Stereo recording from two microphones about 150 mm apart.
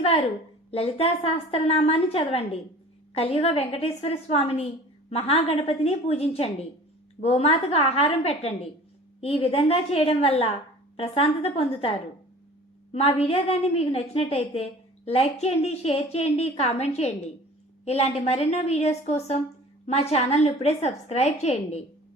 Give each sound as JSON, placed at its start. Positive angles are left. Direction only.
{"t": 0.7, "sound": "a woman's voice", "side_deg": 40}